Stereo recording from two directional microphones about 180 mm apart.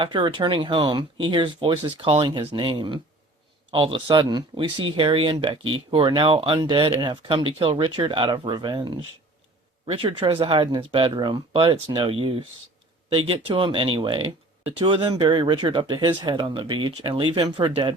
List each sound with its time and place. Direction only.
0.0 s speech: 25° right (ahead or behind)